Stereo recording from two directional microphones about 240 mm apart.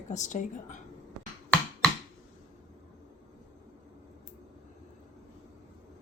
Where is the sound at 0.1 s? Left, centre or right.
Left.